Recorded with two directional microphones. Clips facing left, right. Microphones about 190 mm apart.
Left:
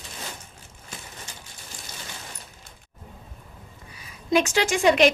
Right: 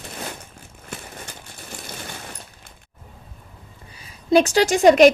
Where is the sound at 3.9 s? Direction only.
30° right (ahead or behind).